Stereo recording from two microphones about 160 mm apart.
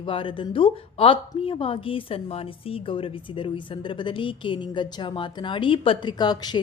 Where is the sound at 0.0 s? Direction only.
35° left (ahead or behind).